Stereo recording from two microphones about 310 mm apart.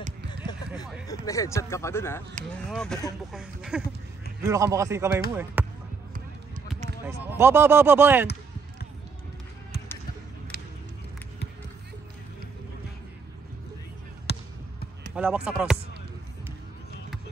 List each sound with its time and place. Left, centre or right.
1.0 s speech: centre
7.1 s speech: centre
10.5 s a sound: right
14.3 s basketball bounce: left
15.1 s speech: centre